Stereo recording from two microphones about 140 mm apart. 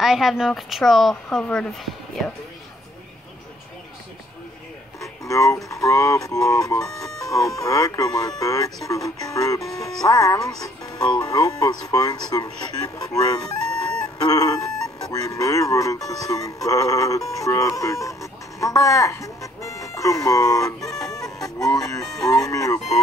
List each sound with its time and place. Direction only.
0.0 s speech: centre (ahead or behind)
5.3 s speech: 25° left (ahead or behind)
6.8 s speech: 5° left (ahead or behind)
7.2 s speech: 25° left (ahead or behind)
13.7 s chicken: 5° left (ahead or behind)
14.1 s speech: 25° left (ahead or behind)
20.8 s music: 25° left (ahead or behind)
22.2 s speech: 25° left (ahead or behind)